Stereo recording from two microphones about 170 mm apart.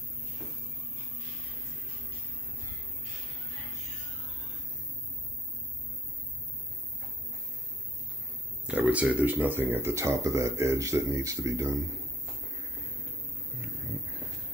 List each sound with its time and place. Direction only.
8.6 s speech: 10° right (ahead or behind)